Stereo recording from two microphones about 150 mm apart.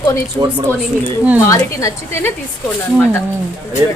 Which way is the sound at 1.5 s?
20° left (ahead or behind).